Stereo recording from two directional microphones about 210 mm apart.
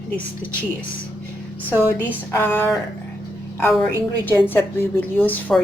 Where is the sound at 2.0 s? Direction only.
10° left (ahead or behind).